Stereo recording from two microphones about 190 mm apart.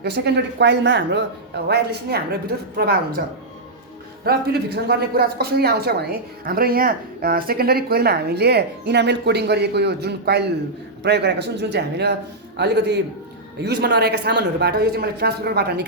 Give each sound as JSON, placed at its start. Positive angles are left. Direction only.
{"t": 0.0, "sound": "speech", "side_deg": -65}